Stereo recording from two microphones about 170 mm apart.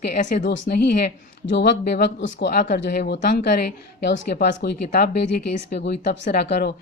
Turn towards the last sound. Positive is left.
turn(degrees=70)  # may be behind; listen again after turning